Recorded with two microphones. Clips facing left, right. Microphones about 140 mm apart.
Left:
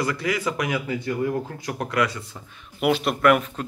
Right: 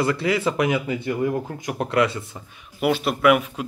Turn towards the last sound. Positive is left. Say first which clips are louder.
# right 1 dB
turn(degrees=-5)  # may be behind; listen again after turning